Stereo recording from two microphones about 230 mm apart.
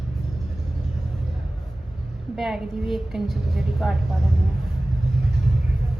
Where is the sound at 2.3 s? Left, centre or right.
Centre.